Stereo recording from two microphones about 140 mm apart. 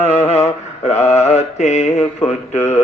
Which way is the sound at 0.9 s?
20° left (ahead or behind).